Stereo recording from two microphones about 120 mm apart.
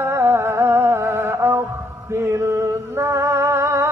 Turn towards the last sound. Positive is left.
turn(degrees=-20)  # may be behind; listen again after turning